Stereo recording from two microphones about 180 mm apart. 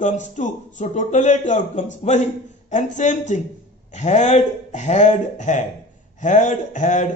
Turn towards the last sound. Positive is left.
turn(degrees=40)  # may be behind; listen again after turning